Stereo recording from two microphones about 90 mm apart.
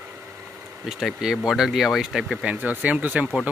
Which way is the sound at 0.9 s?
5° right (ahead or behind).